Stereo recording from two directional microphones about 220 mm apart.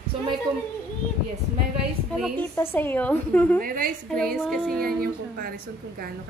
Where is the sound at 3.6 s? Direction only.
40° right (ahead or behind).